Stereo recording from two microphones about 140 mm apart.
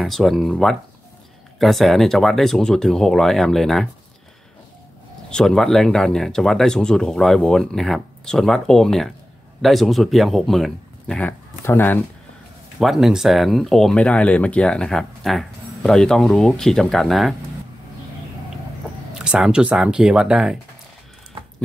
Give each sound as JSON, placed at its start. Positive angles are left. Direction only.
{"t": 0.0, "sound": "speech", "side_deg": 0}
{"t": 5.3, "sound": "speech", "side_deg": 5}
{"t": 12.7, "sound": "speech", "side_deg": 0}
{"t": 19.1, "sound": "speech", "side_deg": -5}